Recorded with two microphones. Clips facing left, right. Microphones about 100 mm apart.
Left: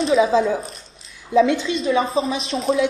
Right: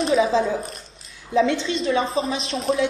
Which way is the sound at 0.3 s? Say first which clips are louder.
Left 3 dB; 15° left (ahead or behind).